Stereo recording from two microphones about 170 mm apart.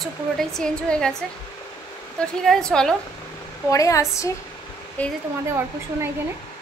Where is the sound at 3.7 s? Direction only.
20° left (ahead or behind).